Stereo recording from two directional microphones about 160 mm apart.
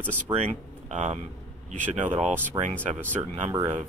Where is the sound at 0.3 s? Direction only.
45° right (ahead or behind).